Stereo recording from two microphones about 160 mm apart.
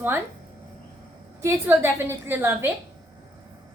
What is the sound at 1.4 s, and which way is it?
A woman's voice, 15° right (ahead or behind).